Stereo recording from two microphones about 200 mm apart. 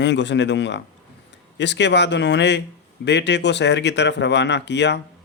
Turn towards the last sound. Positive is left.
turn(degrees=60)  # may be behind; listen again after turning